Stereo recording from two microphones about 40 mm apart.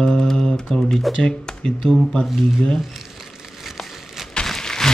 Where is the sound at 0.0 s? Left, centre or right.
Centre.